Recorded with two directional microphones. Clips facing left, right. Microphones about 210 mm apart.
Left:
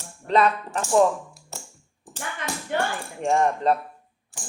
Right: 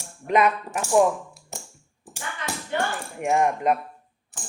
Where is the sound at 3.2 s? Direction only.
15° right (ahead or behind).